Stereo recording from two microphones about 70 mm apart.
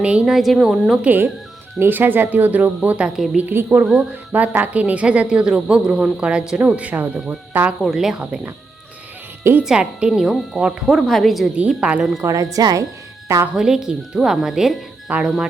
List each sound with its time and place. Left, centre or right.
0.0 s a woman's voice: centre
0.3 s a woman's voice: centre
1.0 s speech: right
3.3 s a woman's voice: right
7.9 s a woman's voice: centre
9.4 s speech: right
9.6 s a woman's voice: centre
11.0 s a woman's voice: centre
11.7 s a woman's voice: centre
12.2 s speech: right
13.2 s a woman's voice: right
13.6 s a woman's voice: centre